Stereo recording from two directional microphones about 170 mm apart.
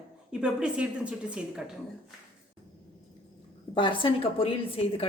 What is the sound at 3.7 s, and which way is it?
Speech, 30° left (ahead or behind).